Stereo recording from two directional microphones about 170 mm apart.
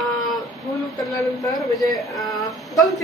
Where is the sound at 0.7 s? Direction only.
25° left (ahead or behind).